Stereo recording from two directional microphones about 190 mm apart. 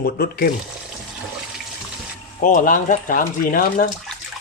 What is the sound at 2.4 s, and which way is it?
Speech, 45° left (ahead or behind).